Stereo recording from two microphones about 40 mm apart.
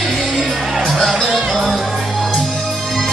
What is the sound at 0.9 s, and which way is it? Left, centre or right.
Music, centre.